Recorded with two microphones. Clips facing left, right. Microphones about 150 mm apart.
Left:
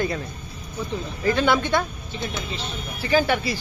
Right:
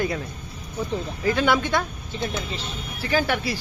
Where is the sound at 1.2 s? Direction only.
5° right (ahead or behind).